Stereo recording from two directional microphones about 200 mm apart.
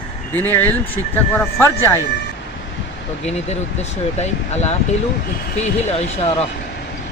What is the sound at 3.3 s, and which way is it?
Speech, 35° left (ahead or behind).